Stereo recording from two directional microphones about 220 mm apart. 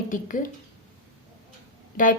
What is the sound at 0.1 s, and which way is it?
Speech, 35° left (ahead or behind).